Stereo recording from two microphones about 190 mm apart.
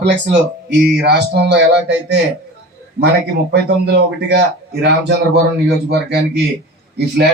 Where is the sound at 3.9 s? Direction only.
60° right (ahead or behind).